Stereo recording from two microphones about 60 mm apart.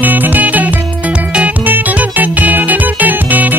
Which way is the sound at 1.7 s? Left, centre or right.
Right.